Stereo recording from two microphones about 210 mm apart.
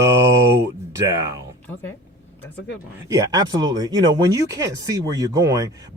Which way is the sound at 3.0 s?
15° right (ahead or behind).